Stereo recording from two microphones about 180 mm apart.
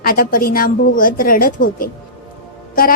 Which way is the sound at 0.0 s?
55° left (ahead or behind).